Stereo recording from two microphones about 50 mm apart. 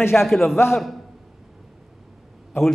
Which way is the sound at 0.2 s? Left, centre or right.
Centre.